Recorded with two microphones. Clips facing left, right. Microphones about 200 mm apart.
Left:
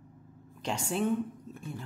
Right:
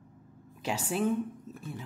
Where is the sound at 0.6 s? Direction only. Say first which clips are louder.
Right 1 dB; 5° right (ahead or behind).